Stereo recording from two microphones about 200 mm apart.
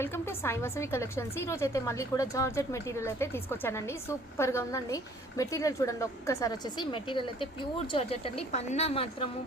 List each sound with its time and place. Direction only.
0.0 s a woman's voice: 10° left (ahead or behind); by 9.3 s 30° left (ahead or behind)